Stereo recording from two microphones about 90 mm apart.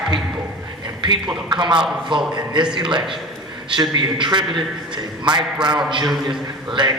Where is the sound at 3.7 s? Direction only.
60° right (ahead or behind).